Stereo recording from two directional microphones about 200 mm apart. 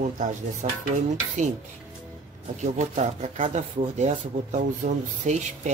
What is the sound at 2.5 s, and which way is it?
Speech, 35° right (ahead or behind).